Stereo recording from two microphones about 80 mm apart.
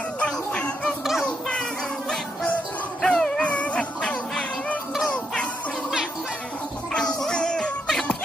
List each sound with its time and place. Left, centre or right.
0.2 s music: centre
3.0 s dog: centre
5.1 s music: centre
6.9 s music: centre